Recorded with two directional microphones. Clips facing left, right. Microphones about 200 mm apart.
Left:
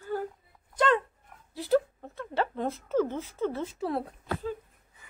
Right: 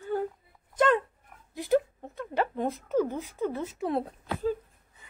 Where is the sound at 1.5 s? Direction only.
15° right (ahead or behind).